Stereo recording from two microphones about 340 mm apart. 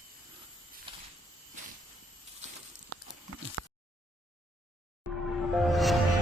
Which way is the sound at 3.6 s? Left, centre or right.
Right.